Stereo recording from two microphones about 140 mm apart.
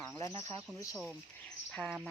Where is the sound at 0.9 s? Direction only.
5° left (ahead or behind).